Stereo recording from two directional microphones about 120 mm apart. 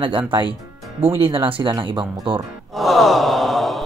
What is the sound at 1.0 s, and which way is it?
Speech, 20° right (ahead or behind).